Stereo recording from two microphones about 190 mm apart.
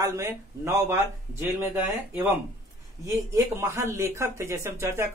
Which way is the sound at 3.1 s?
15° right (ahead or behind).